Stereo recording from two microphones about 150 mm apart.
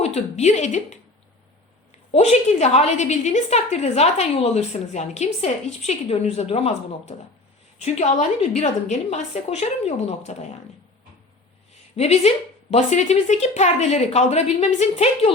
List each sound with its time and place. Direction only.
0.0 s a woman's voice: 45° left (ahead or behind)
11.9 s a woman's voice: 45° left (ahead or behind)